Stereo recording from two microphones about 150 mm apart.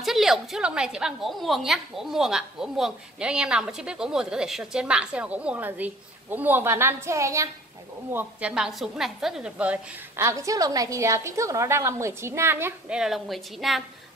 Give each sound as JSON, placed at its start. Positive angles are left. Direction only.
{"t": 0.0, "sound": "a woman's voice", "side_deg": 0}
{"t": 10.1, "sound": "a woman's voice", "side_deg": -20}